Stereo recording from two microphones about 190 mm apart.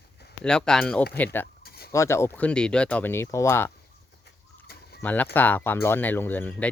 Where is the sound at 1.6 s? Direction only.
55° left (ahead or behind).